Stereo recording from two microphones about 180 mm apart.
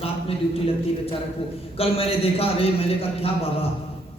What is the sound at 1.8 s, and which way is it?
A man's voice, 35° left (ahead or behind).